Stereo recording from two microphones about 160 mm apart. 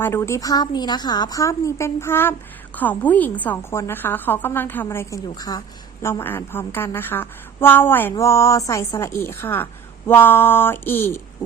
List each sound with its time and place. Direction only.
0.0 s a woman's voice: 15° left (ahead or behind)